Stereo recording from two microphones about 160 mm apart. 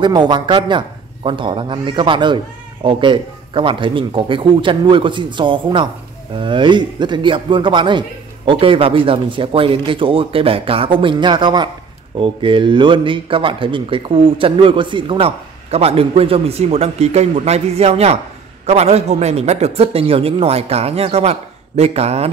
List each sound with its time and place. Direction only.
0.0 s a man's voice: 30° right (ahead or behind)